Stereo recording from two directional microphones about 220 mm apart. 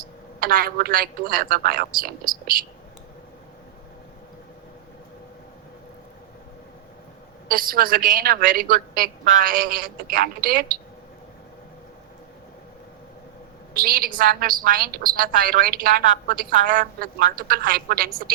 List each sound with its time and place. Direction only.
0.3 s a woman's voice: 40° right (ahead or behind)
7.4 s a woman's voice: 40° right (ahead or behind)
13.8 s a woman's voice: 40° right (ahead or behind)